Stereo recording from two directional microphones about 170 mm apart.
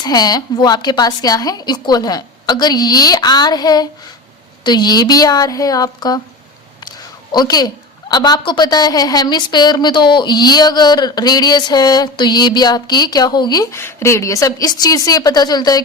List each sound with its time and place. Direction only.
0.0 s a woman's voice: 25° left (ahead or behind)
7.3 s a woman's voice: 25° left (ahead or behind)